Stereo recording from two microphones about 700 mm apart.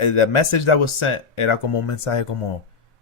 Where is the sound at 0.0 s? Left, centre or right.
Left.